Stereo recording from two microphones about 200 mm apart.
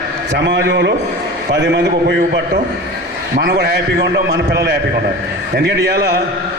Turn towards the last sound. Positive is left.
turn(degrees=-55)  # may be behind; listen again after turning